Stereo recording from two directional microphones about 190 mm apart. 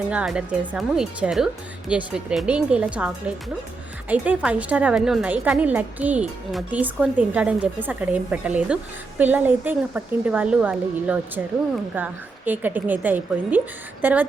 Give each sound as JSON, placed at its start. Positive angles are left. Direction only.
{"t": 0.1, "sound": "a woman's voice", "side_deg": -5}